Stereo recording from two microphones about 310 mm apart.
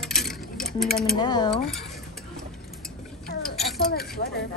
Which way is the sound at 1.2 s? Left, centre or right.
Centre.